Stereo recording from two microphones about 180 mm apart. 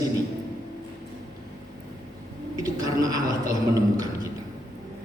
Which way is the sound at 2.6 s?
20° right (ahead or behind).